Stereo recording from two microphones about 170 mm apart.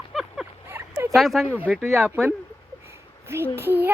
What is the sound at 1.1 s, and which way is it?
Speech, centre (ahead or behind).